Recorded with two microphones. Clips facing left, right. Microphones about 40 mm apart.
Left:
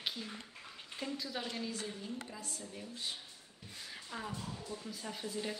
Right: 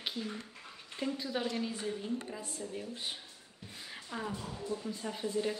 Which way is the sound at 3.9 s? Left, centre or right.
Centre.